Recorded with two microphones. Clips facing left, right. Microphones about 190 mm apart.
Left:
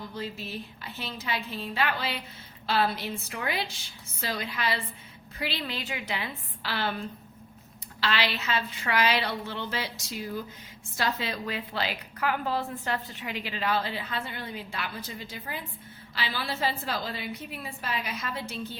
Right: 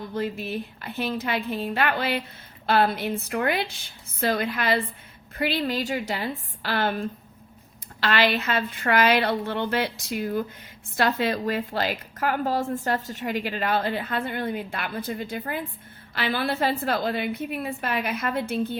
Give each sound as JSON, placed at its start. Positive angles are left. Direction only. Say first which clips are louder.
{"t": 0.1, "sound": "a woman's voice", "louder": "right 11 dB", "side_deg": -55}
{"t": 8.0, "sound": "a woman's voice", "louder": "right 6 dB", "side_deg": -50}